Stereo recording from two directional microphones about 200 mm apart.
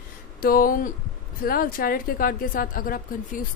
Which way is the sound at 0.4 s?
45° left (ahead or behind).